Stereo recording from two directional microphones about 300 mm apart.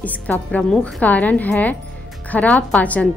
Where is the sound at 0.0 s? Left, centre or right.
Centre.